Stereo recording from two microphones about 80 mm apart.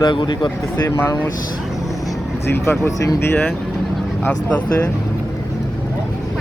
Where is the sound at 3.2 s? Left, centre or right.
Left.